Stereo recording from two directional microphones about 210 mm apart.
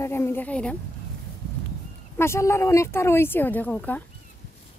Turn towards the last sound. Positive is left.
turn(degrees=5)  # may be behind; listen again after turning